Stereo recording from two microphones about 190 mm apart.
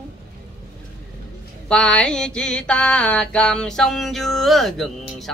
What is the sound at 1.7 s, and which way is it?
Mantra, 5° left (ahead or behind).